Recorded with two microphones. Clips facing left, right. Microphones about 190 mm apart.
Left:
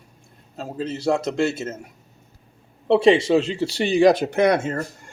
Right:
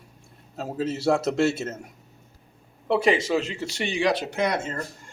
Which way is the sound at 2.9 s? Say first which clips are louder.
Left 6 dB; 30° left (ahead or behind).